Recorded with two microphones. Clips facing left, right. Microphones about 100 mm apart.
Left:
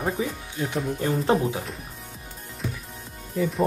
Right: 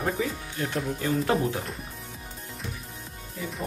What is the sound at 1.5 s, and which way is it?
Speech, centre (ahead or behind).